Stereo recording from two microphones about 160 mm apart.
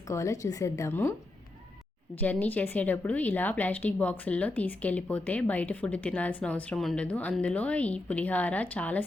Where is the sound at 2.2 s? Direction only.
10° left (ahead or behind).